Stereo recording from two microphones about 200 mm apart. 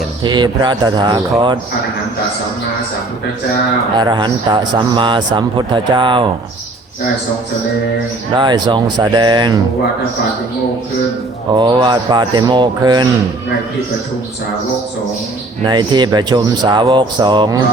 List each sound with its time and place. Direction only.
0.2 s speech: 20° right (ahead or behind)
3.9 s speech: 20° right (ahead or behind)
8.4 s speech: 20° right (ahead or behind)
11.5 s speech: 25° right (ahead or behind)
15.6 s speech: 20° right (ahead or behind)